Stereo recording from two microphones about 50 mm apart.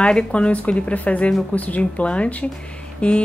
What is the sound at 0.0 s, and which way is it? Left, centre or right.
Speech, centre.